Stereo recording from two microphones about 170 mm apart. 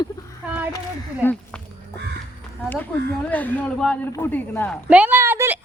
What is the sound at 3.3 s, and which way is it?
A woman's voice, 10° left (ahead or behind).